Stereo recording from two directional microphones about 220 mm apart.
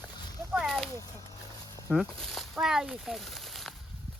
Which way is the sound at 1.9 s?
Centre (ahead or behind).